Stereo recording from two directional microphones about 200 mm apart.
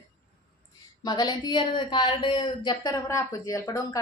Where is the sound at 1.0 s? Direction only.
20° left (ahead or behind).